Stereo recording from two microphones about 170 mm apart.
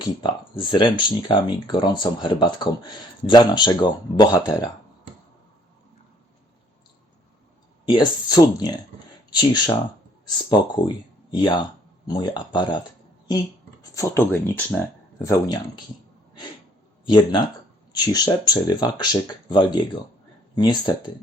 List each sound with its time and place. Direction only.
0.0 s speech: 30° left (ahead or behind)
7.9 s speech: 25° left (ahead or behind)
13.9 s speech: 15° left (ahead or behind)
17.9 s speech: 25° left (ahead or behind)